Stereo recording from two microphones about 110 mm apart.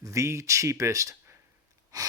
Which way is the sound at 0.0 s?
25° right (ahead or behind).